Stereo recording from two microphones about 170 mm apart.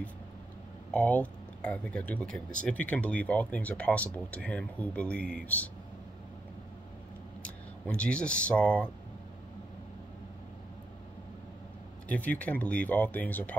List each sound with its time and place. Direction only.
0.9 s speech: 10° left (ahead or behind)
7.4 s speech: 5° left (ahead or behind)
12.1 s speech: 10° left (ahead or behind)